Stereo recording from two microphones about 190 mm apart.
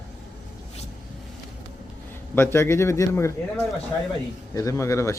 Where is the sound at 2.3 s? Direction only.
15° left (ahead or behind).